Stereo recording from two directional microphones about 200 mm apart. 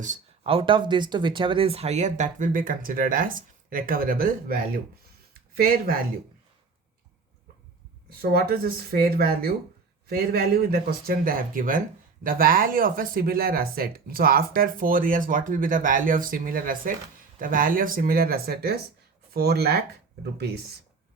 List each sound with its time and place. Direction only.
0.0 s speech: 30° right (ahead or behind)
8.2 s speech: 50° right (ahead or behind)